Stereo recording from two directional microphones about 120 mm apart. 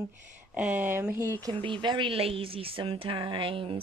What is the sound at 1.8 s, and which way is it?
Speech, 40° right (ahead or behind).